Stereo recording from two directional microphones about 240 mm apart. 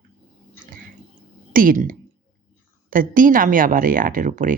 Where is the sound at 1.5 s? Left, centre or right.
Right.